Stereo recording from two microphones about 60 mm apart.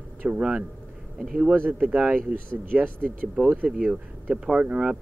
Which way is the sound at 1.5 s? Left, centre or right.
Right.